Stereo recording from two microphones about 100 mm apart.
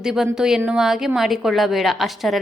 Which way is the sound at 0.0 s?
5° right (ahead or behind).